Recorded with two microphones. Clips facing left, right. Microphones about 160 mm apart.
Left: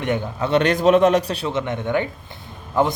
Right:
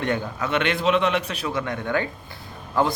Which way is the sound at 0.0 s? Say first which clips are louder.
Left 2 dB; 20° left (ahead or behind).